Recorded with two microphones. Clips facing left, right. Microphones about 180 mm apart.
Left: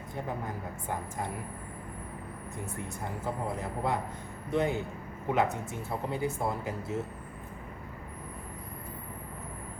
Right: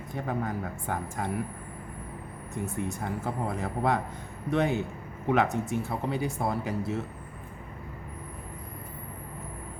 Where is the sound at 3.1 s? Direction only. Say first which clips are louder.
Right 3 dB; 85° right.